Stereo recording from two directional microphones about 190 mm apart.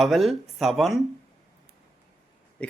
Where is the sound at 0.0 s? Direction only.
Centre (ahead or behind).